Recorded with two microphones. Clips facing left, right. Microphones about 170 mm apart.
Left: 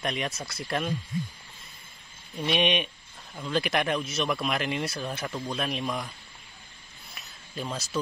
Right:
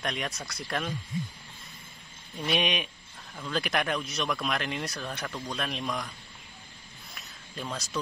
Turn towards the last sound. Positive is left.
turn(degrees=0)  # may be behind; listen again after turning